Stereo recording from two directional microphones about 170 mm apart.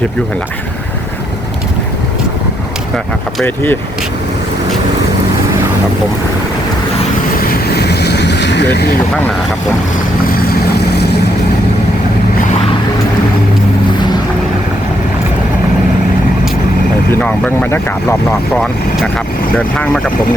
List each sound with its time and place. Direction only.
3.4 s speech: 10° left (ahead or behind)
7.4 s vehicle: 70° left (ahead or behind); by 8.9 s 85° left
10.3 s vehicle: 70° left (ahead or behind)
17.1 s speech: 10° left (ahead or behind)
19.5 s speech: 5° left (ahead or behind)